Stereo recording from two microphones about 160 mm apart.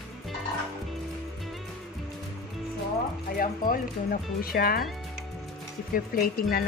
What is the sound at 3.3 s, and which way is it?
Speech, 60° left (ahead or behind).